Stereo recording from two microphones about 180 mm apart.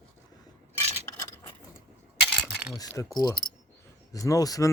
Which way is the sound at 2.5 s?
10° right (ahead or behind).